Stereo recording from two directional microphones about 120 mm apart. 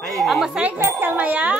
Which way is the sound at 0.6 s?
15° right (ahead or behind).